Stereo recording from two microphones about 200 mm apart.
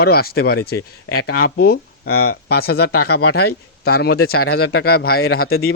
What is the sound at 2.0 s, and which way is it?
Speech, 90° left.